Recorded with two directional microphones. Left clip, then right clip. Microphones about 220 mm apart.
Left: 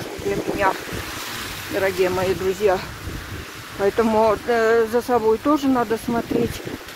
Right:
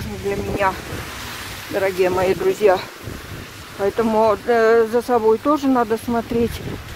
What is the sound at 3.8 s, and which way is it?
Speech, 10° right (ahead or behind).